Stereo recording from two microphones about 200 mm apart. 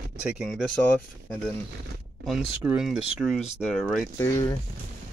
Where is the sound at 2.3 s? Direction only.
Centre (ahead or behind).